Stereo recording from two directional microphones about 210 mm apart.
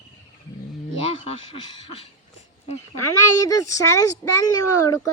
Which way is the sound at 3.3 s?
15° left (ahead or behind).